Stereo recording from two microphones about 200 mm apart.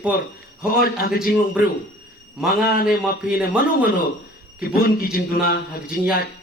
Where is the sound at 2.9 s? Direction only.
5° right (ahead or behind).